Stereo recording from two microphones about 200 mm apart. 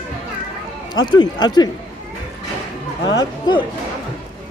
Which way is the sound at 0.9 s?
20° left (ahead or behind).